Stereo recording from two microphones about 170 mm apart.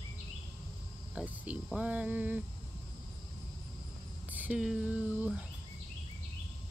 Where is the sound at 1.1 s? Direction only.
10° right (ahead or behind).